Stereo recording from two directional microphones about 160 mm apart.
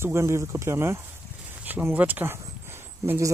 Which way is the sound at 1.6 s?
10° right (ahead or behind).